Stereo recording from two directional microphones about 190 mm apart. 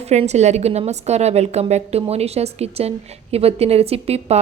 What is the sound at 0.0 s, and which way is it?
A woman's voice, 35° right (ahead or behind).